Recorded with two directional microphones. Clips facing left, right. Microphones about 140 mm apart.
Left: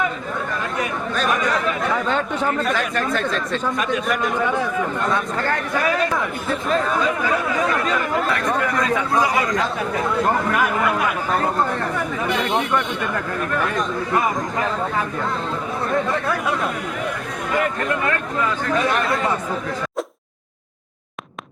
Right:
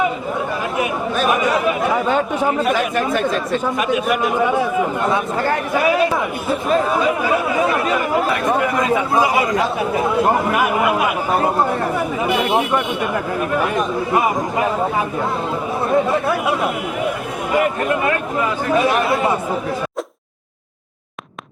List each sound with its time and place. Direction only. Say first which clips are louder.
1.4 s speech: right 4 dB; 20° right (ahead or behind)